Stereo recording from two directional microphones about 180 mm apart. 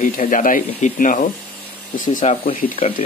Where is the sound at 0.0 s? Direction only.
50° left (ahead or behind).